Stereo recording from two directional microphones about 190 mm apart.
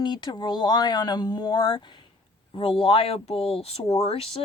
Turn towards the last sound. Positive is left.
turn(degrees=30)  # may be behind; listen again after turning